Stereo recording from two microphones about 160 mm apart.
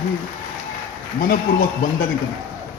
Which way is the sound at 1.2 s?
60° left (ahead or behind).